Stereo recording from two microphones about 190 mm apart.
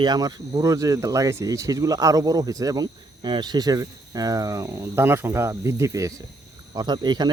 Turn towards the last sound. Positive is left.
turn(degrees=-20)  # may be behind; listen again after turning